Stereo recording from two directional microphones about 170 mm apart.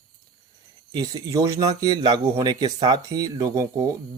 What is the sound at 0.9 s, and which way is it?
Speech, 20° right (ahead or behind).